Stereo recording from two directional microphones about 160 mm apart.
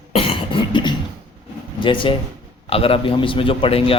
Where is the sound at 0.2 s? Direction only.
35° left (ahead or behind).